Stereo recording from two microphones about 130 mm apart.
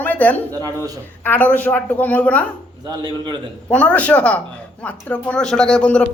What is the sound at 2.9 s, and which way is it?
Speech, 35° right (ahead or behind).